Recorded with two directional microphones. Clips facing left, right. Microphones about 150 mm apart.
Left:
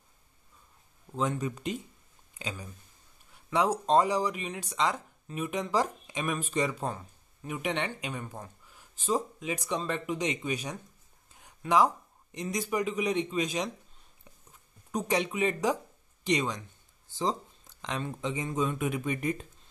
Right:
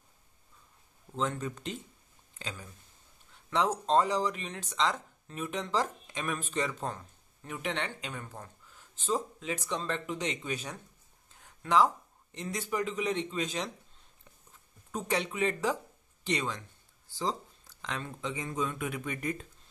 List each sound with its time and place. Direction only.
1.1 s speech: 10° left (ahead or behind)
14.9 s speech: 15° left (ahead or behind)